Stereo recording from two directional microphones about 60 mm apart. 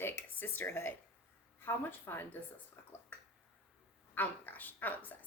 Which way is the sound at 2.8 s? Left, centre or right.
Left.